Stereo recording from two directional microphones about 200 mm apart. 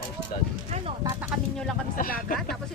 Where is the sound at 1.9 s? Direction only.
45° left (ahead or behind).